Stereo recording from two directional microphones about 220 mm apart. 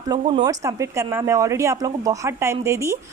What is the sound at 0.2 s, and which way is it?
Speech, 20° right (ahead or behind).